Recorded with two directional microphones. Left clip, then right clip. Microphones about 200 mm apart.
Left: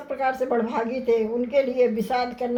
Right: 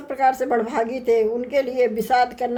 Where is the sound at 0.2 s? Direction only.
40° right (ahead or behind).